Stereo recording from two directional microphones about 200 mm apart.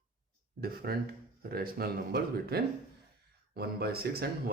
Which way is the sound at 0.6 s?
50° right (ahead or behind).